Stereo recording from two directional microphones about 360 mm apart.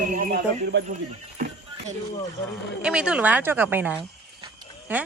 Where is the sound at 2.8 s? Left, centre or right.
Centre.